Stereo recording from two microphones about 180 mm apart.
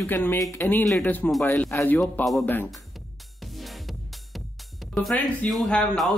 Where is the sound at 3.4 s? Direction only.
Centre (ahead or behind).